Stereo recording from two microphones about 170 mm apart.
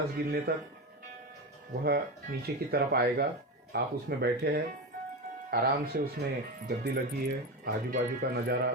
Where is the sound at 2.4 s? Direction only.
65° right (ahead or behind).